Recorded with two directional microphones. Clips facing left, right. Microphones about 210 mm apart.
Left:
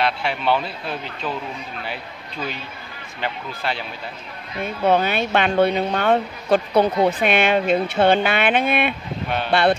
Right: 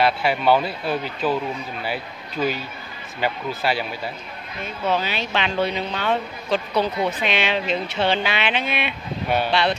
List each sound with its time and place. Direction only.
0.0 s speech: 5° right (ahead or behind)
4.8 s speech: 55° left (ahead or behind)